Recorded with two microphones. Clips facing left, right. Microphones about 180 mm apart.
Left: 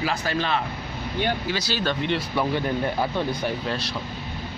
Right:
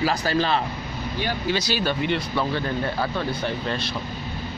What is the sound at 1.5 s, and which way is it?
Speech, 15° right (ahead or behind).